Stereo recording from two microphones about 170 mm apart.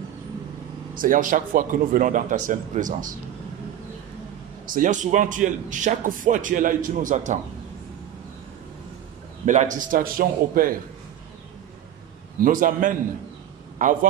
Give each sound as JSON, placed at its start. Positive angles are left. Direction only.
{"t": 0.9, "sound": "speech", "side_deg": -50}
{"t": 4.6, "sound": "speech", "side_deg": -50}
{"t": 9.5, "sound": "a man's voice", "side_deg": -45}
{"t": 12.4, "sound": "speech", "side_deg": -55}